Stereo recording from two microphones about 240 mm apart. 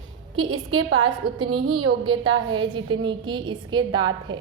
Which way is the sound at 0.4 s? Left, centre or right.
Right.